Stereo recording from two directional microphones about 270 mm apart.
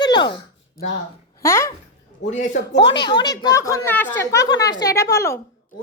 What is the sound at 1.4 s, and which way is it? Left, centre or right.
Speech, centre.